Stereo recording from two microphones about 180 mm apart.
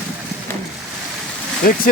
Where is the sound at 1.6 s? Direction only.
50° left (ahead or behind).